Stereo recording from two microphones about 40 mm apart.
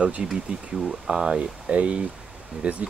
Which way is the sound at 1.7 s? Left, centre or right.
Right.